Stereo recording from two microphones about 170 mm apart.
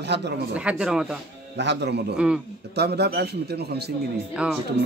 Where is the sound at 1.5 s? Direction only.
90° right.